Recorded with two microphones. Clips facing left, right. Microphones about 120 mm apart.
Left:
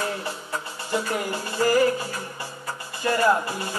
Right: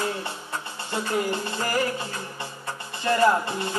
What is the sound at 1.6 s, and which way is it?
Music, 25° left (ahead or behind).